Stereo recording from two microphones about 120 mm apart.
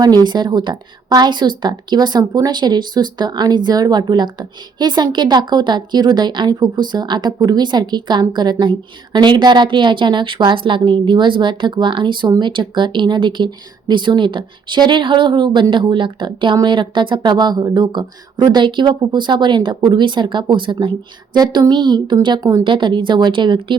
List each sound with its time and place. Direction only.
0.3 s a woman's voice: 35° right (ahead or behind)
22.6 s a woman's voice: 45° right (ahead or behind)